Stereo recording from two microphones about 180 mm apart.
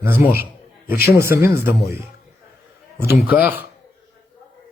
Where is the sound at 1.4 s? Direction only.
15° right (ahead or behind).